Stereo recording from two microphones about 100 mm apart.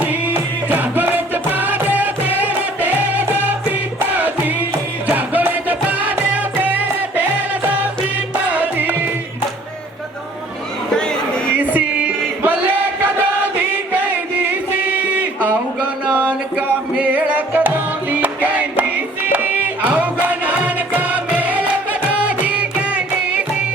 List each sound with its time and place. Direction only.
0.0 s music: 15° right (ahead or behind)
8.4 s music: 15° right (ahead or behind)
11.5 s music: 15° right (ahead or behind)
13.9 s music: 20° right (ahead or behind)
16.1 s music: 15° right (ahead or behind)